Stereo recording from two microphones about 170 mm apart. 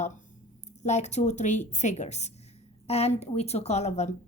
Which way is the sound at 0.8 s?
40° left (ahead or behind).